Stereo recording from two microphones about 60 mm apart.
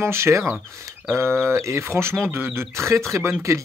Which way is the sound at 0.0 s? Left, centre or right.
Right.